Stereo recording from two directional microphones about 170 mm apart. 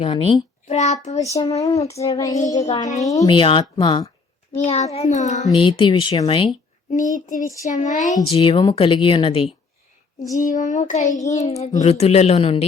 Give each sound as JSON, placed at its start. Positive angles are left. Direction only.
{"t": 0.0, "sound": "a child's voice", "side_deg": 35}
{"t": 1.3, "sound": "speech", "side_deg": 20}
{"t": 4.5, "sound": "a woman's voice", "side_deg": 40}
{"t": 5.5, "sound": "speech", "side_deg": 30}
{"t": 6.9, "sound": "child singing", "side_deg": 50}
{"t": 8.3, "sound": "a woman's voice", "side_deg": 30}
{"t": 10.3, "sound": "child singing", "side_deg": 50}
{"t": 11.3, "sound": "a woman's voice", "side_deg": 40}